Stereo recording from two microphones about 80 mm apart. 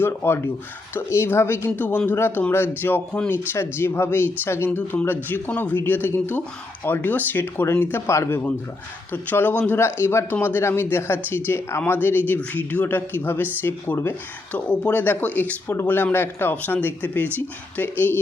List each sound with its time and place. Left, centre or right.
0.0 s speech: left
3.1 s speech: centre
3.5 s speech: left
9.1 s speech: left